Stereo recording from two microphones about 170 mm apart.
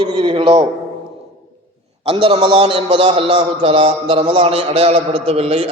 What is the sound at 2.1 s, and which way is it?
A man's voice, 30° right (ahead or behind).